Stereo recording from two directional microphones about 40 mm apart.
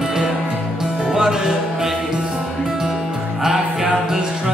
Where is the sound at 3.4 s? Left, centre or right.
Centre.